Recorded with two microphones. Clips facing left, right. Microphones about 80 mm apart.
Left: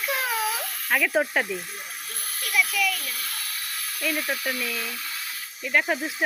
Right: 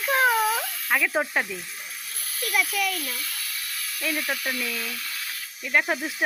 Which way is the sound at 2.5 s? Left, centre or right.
Right.